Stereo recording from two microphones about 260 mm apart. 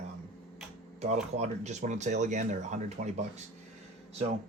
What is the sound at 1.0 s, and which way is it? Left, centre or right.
Speech, right.